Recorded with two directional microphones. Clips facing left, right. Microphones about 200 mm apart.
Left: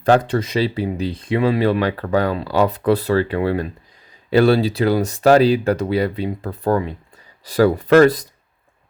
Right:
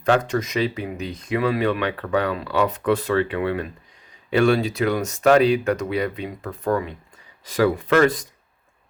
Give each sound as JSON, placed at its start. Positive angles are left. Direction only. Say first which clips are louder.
{"t": 0.0, "sound": "speech", "louder": "left 4 dB", "side_deg": 35}